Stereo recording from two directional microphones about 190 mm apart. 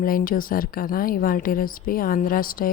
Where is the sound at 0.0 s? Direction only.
50° left (ahead or behind).